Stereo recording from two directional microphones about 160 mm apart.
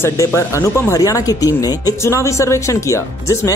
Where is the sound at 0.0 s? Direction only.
15° left (ahead or behind).